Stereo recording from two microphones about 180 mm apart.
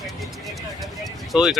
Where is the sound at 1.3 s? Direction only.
Centre (ahead or behind).